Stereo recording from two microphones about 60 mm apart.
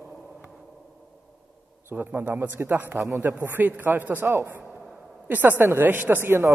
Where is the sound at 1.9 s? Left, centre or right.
Right.